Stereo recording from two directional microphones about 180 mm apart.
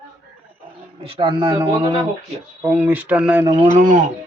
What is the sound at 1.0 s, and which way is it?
A man's voice, 25° right (ahead or behind).